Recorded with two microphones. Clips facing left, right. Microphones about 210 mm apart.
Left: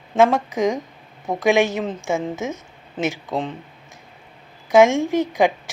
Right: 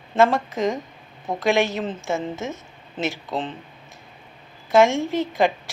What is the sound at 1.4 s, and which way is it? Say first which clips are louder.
Speech: left 3 dB; 15° left (ahead or behind).